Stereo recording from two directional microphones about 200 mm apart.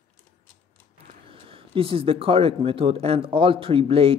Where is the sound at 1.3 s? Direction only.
25° right (ahead or behind).